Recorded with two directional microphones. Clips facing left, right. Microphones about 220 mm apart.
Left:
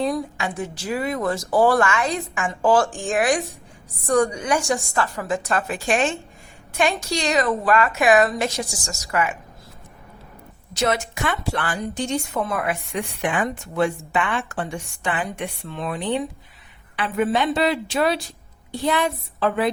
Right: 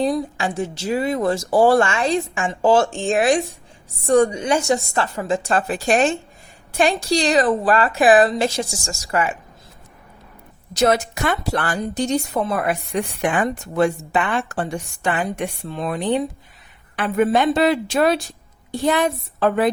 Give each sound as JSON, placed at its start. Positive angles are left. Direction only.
{"t": 0.0, "sound": "a woman's voice", "side_deg": -30}
{"t": 10.8, "sound": "a woman's voice", "side_deg": -40}